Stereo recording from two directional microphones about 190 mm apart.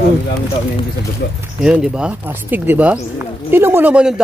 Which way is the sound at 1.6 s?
5° right (ahead or behind).